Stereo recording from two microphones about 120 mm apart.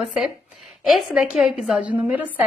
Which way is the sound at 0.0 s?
5° right (ahead or behind).